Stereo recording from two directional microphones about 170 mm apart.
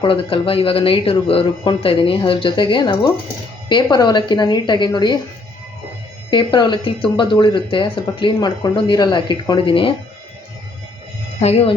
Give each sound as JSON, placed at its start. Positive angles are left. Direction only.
{"t": 0.0, "sound": "speech", "side_deg": 30}
{"t": 6.3, "sound": "speech", "side_deg": 30}
{"t": 11.3, "sound": "speech", "side_deg": 35}